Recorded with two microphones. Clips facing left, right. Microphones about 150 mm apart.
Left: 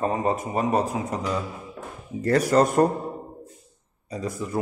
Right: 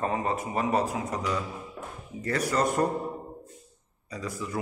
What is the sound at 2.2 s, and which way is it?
Speech, 40° left (ahead or behind).